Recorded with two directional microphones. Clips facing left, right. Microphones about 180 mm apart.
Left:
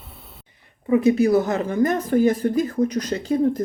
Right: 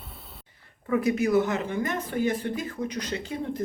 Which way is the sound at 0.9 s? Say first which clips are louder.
Left 6 dB; 25° left (ahead or behind).